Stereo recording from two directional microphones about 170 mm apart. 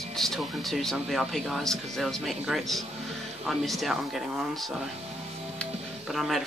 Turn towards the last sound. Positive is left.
turn(degrees=0)  # may be behind; listen again after turning